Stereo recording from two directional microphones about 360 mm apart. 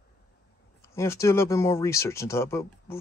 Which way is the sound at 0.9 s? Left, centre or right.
Centre.